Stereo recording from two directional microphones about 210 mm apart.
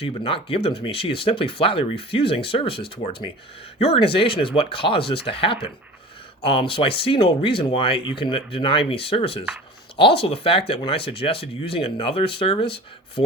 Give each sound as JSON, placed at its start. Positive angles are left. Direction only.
{"t": 0.0, "sound": "speech", "side_deg": 25}